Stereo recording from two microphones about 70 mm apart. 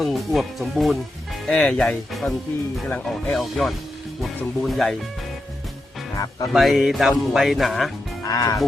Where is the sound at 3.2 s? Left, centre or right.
Centre.